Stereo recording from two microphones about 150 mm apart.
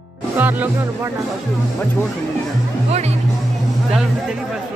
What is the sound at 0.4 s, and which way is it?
Music, 10° right (ahead or behind).